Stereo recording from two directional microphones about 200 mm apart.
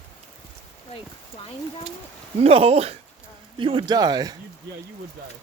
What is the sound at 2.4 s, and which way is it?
Speech, 30° right (ahead or behind).